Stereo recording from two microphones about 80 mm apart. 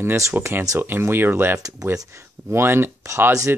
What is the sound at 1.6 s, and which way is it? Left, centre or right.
Speech, right.